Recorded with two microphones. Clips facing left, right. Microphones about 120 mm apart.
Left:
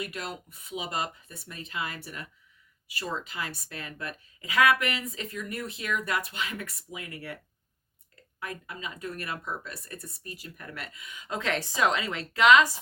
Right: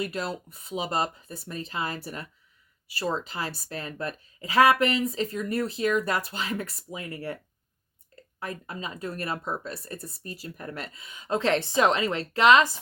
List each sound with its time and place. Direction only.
0.0 s speech: 35° right (ahead or behind)
8.4 s speech: 35° right (ahead or behind)